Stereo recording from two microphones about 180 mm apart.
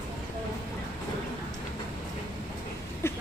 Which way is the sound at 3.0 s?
15° left (ahead or behind).